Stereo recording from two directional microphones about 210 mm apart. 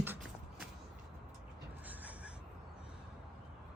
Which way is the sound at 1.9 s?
5° right (ahead or behind).